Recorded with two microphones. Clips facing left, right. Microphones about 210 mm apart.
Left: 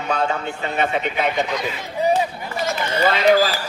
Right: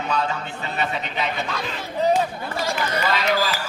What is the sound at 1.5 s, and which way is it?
Speech, 15° left (ahead or behind).